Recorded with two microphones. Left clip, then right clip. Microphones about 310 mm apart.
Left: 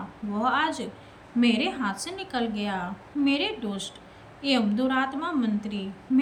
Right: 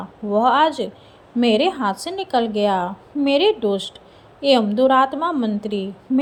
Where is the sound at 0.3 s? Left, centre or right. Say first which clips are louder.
Right 10 dB; centre.